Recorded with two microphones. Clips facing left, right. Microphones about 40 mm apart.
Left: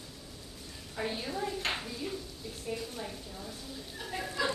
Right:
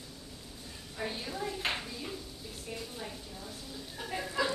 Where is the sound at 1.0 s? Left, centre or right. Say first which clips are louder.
Left 2 dB; centre.